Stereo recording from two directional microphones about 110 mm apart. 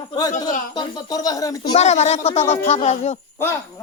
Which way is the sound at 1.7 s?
90° left.